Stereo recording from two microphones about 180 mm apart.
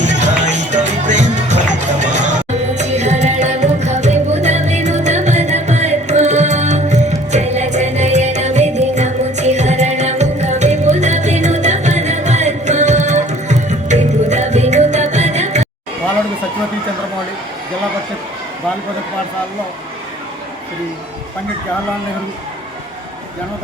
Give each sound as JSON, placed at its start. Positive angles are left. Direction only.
{"t": 0.0, "sound": "music", "side_deg": -40}